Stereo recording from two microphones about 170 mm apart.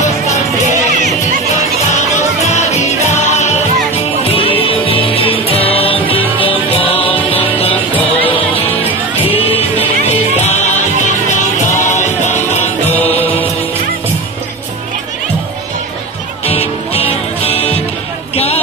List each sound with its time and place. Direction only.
2.0 s music: 40° left (ahead or behind)
4.6 s music: 35° left (ahead or behind)
8.2 s music: 30° left (ahead or behind)
10.0 s music: 40° left (ahead or behind)
16.4 s music: 35° left (ahead or behind)
18.3 s a sound: 35° left (ahead or behind)